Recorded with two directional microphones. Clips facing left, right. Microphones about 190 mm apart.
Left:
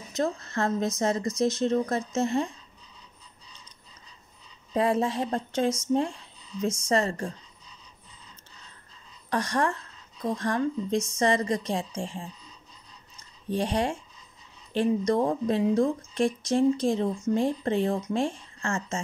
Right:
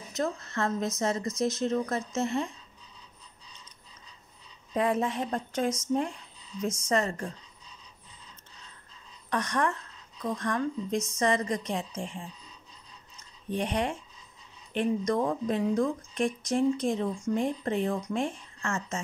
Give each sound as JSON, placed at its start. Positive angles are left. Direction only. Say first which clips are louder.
{"t": 0.2, "sound": "a woman's voice", "louder": "left 3 dB", "side_deg": 35}
{"t": 4.7, "sound": "a woman's voice", "louder": "left 3 dB", "side_deg": 30}
{"t": 9.3, "sound": "a woman's voice", "louder": "left 2 dB", "side_deg": 30}
{"t": 13.5, "sound": "a woman's voice", "louder": "left 3 dB", "side_deg": 35}